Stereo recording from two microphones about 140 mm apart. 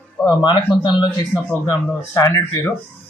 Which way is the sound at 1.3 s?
15° left (ahead or behind).